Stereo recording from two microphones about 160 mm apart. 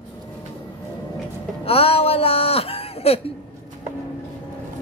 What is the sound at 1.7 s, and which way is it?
Speech, 35° left (ahead or behind).